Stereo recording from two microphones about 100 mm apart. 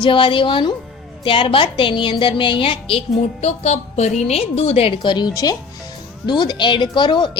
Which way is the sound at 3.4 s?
90° left.